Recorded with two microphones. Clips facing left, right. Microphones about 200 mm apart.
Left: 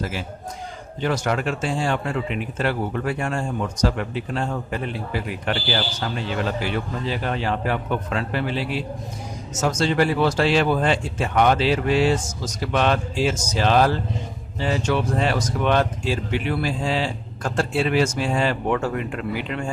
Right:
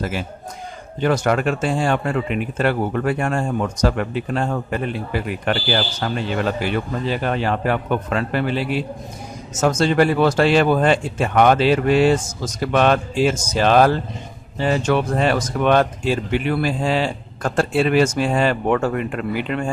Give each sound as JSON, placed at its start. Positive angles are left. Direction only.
{"t": 0.0, "sound": "speech", "side_deg": -55}